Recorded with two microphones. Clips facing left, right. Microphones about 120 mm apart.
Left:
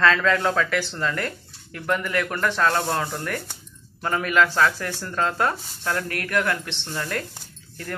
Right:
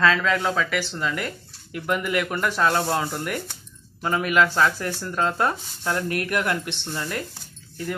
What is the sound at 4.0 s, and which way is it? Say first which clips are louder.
Speech: even; 10° right (ahead or behind).